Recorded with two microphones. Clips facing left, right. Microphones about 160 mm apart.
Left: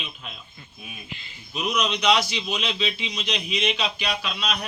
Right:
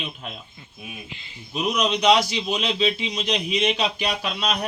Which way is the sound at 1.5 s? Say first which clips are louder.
Right 3 dB; 35° right (ahead or behind).